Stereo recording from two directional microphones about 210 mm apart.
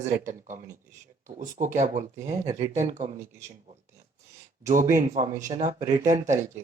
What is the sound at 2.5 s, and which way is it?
Speech, 15° right (ahead or behind).